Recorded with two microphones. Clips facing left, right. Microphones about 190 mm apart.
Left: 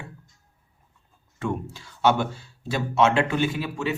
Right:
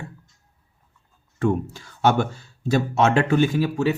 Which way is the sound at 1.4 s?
50° right (ahead or behind).